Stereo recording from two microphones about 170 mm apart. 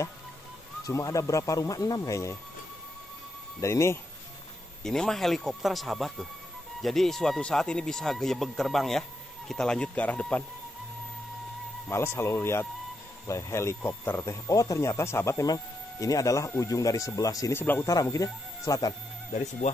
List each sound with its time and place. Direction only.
0.8 s speech: 20° left (ahead or behind)
3.6 s speech: 15° left (ahead or behind)
4.8 s speech: 5° left (ahead or behind)
11.9 s speech: 15° left (ahead or behind)
19.3 s speech: 45° left (ahead or behind)